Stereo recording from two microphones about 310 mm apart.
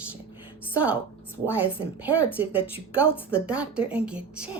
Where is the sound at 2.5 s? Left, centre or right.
Centre.